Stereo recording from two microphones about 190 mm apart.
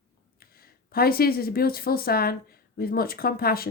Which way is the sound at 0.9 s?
50° left (ahead or behind).